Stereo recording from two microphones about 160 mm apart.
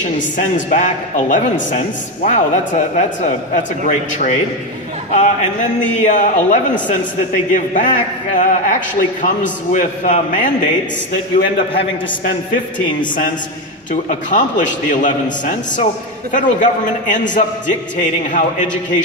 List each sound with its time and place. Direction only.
0.0 s a man's voice: 50° left (ahead or behind)
14.0 s a man's voice: 50° left (ahead or behind)